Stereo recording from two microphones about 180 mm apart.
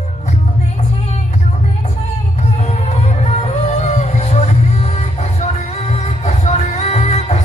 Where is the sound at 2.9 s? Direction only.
40° left (ahead or behind).